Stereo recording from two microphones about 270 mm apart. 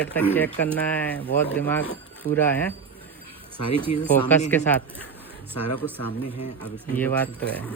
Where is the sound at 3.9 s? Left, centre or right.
Left.